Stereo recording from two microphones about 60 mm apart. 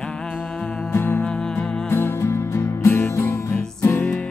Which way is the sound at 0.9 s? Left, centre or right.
Left.